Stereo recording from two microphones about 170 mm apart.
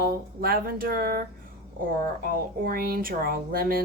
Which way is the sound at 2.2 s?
60° right (ahead or behind).